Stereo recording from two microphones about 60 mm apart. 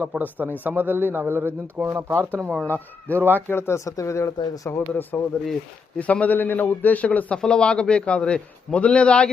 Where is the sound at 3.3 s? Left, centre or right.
Left.